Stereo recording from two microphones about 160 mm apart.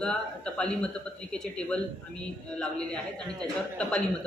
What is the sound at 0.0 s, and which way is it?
A man's voice, 5° left (ahead or behind).